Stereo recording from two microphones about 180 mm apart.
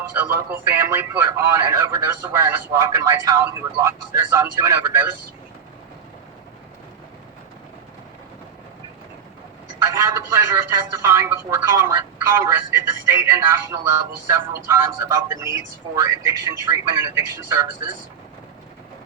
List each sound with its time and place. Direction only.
0.1 s speech: 10° right (ahead or behind)
9.8 s speech: 20° right (ahead or behind)